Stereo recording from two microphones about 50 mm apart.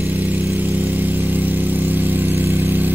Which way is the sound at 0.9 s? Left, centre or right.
Right.